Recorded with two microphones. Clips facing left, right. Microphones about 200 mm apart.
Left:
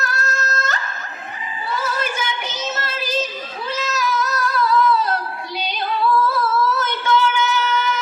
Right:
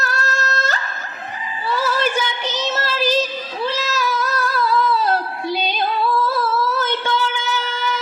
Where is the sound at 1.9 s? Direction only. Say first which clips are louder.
Right 4 dB; 35° right (ahead or behind).